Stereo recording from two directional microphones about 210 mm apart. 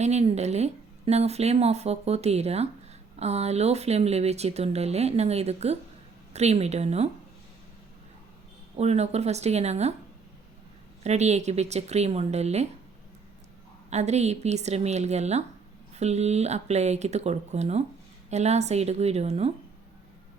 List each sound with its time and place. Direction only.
0.0 s speech: 30° right (ahead or behind)
8.7 s speech: 30° right (ahead or behind)
11.0 s speech: 30° right (ahead or behind)
13.9 s speech: 30° right (ahead or behind)